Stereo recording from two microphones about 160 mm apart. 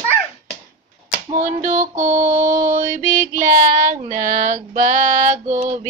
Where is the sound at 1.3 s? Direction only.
50° right (ahead or behind).